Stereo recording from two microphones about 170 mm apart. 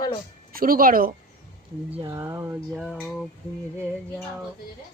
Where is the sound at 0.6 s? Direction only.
55° right (ahead or behind).